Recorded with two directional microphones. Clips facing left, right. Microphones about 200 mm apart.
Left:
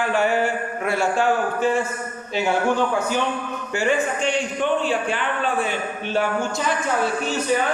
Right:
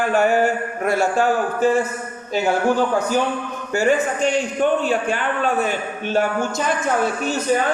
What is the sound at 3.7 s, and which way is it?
Speech, 40° right (ahead or behind).